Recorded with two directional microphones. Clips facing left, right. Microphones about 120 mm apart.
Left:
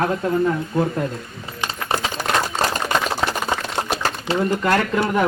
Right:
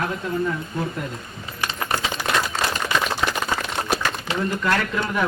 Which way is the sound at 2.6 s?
40° left (ahead or behind).